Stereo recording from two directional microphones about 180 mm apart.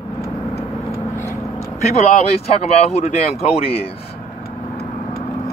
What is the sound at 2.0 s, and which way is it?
Speech, 35° left (ahead or behind).